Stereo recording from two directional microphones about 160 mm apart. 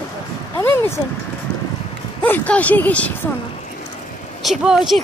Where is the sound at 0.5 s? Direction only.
15° left (ahead or behind).